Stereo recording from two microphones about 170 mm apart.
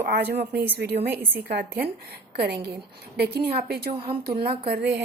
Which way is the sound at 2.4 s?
70° right (ahead or behind).